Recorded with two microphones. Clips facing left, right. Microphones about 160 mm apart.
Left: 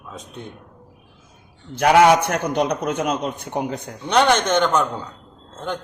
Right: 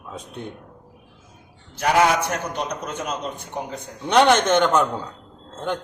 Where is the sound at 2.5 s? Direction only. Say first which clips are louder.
Left 7 dB; 65° left (ahead or behind).